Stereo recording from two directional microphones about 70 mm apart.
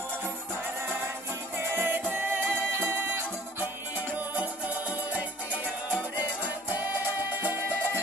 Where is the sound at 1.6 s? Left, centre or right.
Right.